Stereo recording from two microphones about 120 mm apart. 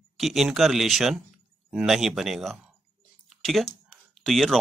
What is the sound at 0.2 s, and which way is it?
Speech, centre (ahead or behind).